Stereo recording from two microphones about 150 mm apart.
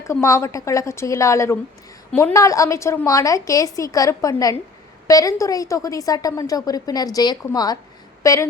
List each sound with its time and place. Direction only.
0.0 s a woman's voice: 20° left (ahead or behind)